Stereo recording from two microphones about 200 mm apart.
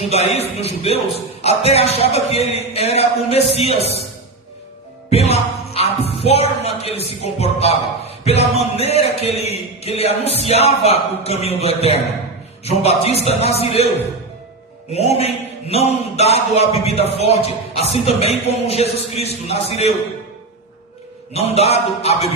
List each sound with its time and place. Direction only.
0.1 s speech: 30° left (ahead or behind)
5.0 s speech: 30° left (ahead or behind)
14.9 s speech: 30° left (ahead or behind)
21.3 s speech: 30° left (ahead or behind)